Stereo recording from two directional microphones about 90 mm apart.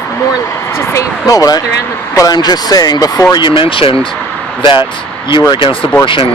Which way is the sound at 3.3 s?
65° left (ahead or behind).